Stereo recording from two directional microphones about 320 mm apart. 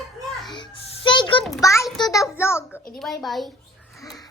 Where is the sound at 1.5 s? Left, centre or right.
Centre.